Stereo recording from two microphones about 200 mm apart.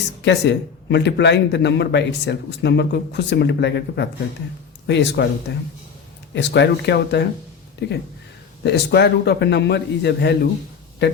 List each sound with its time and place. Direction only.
0.2 s speech: 60° left (ahead or behind)
6.3 s speech: 60° left (ahead or behind)